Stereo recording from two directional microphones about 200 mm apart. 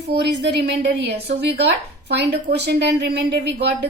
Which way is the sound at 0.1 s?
55° right (ahead or behind).